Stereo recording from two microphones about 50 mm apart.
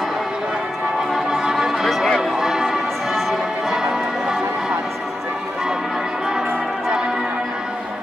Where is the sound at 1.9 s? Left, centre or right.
Centre.